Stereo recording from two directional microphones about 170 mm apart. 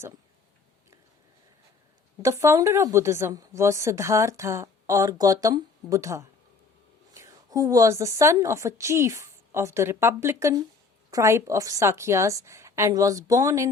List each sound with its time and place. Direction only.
2.2 s a woman's voice: 15° right (ahead or behind)